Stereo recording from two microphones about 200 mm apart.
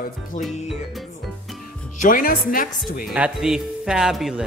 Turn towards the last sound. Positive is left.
turn(degrees=-5)  # may be behind; listen again after turning